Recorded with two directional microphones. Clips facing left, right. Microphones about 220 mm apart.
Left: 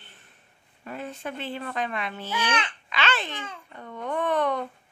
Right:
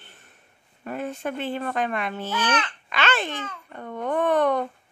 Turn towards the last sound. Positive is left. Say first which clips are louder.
# right 4 dB
turn(degrees=-50)  # may be behind; listen again after turning